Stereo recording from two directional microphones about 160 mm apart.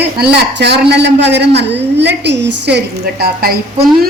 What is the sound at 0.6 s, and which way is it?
A woman's voice, 90° right.